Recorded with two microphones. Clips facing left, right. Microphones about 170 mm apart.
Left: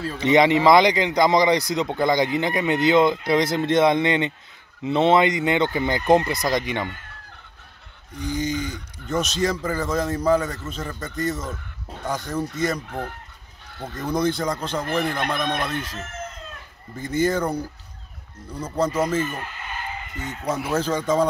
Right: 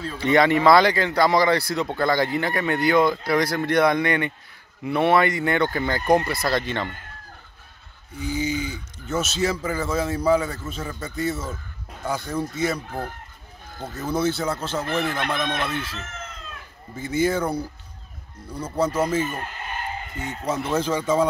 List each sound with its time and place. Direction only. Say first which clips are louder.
0.2 s speech: left 1 dB; 20° left (ahead or behind)
8.2 s a man's voice: even; 10° right (ahead or behind)
13.9 s a man's voice: left 1 dB; 5° right (ahead or behind)
15.2 s speech: left 1 dB; 10° left (ahead or behind)
15.6 s a man's voice: even; 10° right (ahead or behind)
16.9 s a man's voice: even; 10° right (ahead or behind)
19.0 s a man's voice: even; 10° right (ahead or behind)
20.4 s speech: even; 10° left (ahead or behind)
20.7 s a man's voice: even; 10° right (ahead or behind)